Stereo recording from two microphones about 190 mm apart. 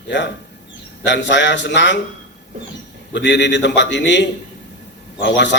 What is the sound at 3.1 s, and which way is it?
A man's voice, 70° left (ahead or behind).